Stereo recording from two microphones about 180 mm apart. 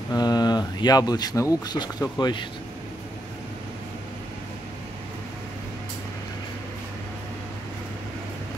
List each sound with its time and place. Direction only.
0.1 s speech: 20° left (ahead or behind)